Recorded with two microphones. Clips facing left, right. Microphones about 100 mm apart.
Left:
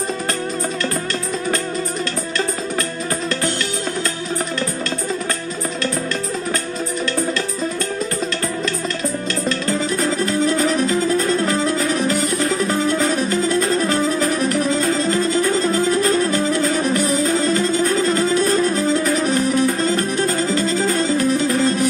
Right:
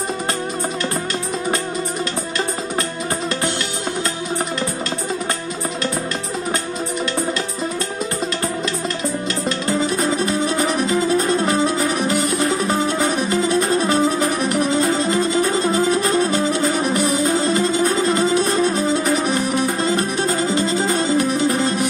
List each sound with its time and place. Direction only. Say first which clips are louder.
9.7 s music: right 3 dB; 25° right (ahead or behind)
10.9 s music: even; 30° right (ahead or behind)
12.8 s music: left 1 dB; 20° right (ahead or behind)
20.2 s music: even; 30° right (ahead or behind)